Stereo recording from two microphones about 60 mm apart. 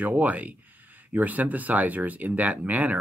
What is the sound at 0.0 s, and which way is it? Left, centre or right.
Speech, right.